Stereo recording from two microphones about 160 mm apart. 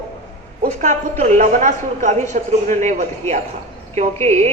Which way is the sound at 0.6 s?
50° right (ahead or behind).